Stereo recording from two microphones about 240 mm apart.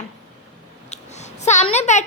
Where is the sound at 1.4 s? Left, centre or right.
Left.